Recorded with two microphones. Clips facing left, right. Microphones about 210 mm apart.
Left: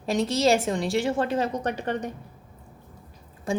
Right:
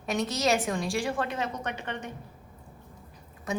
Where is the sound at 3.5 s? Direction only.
30° left (ahead or behind).